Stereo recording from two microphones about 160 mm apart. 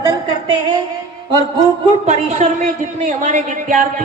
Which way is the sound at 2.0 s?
45° right (ahead or behind).